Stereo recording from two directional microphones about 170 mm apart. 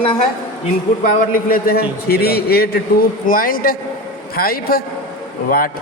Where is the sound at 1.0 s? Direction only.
55° left (ahead or behind).